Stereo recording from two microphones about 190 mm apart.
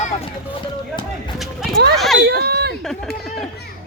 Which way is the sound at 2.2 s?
60° right (ahead or behind).